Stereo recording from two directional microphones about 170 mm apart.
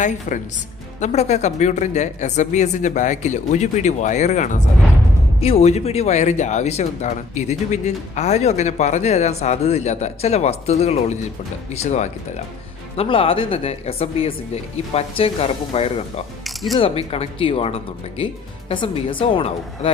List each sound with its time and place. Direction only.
0.0 s speech: 45° left (ahead or behind)
16.4 s music: centre (ahead or behind)
16.7 s speech: 35° left (ahead or behind)